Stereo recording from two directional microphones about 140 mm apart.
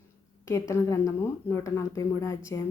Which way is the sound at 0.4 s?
20° left (ahead or behind).